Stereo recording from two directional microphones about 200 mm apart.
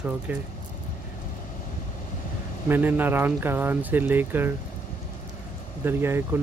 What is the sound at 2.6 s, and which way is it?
A man's voice, 10° right (ahead or behind).